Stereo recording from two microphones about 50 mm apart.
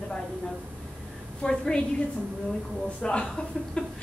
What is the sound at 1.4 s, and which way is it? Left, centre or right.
Speech, centre.